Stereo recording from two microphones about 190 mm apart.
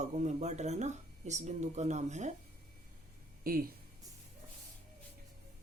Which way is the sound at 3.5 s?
50° right (ahead or behind).